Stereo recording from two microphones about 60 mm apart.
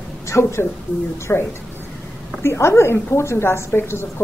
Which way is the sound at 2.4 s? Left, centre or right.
Left.